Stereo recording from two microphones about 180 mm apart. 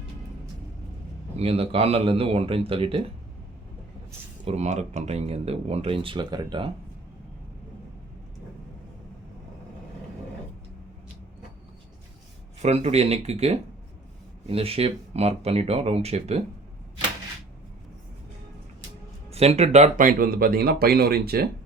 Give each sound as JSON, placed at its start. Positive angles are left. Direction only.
{"t": 1.4, "sound": "speech", "side_deg": -35}
{"t": 4.4, "sound": "speech", "side_deg": -40}
{"t": 12.6, "sound": "speech", "side_deg": -35}
{"t": 19.3, "sound": "speech", "side_deg": -35}